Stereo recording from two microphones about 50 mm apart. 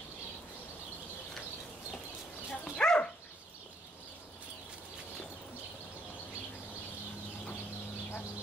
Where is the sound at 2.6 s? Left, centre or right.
Left.